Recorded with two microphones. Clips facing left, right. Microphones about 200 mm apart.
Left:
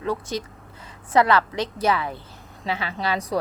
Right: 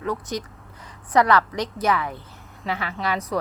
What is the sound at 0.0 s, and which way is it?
A woman's voice, 30° left (ahead or behind).